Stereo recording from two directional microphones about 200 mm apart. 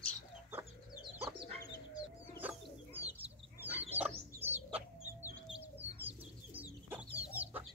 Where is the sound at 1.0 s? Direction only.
25° right (ahead or behind).